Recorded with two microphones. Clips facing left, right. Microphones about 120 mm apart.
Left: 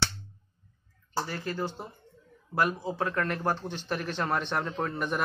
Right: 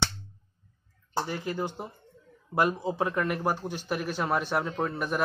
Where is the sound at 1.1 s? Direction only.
15° right (ahead or behind).